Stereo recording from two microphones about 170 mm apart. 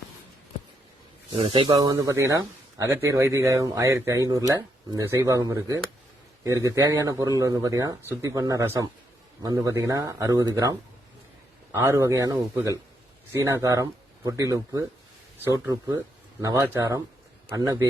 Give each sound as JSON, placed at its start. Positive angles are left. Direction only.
{"t": 1.3, "sound": "speech", "side_deg": -30}